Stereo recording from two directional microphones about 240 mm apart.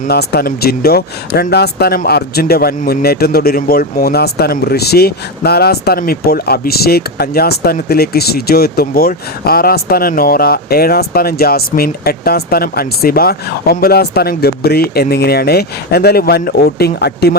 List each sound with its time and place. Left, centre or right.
0.1 s speech: left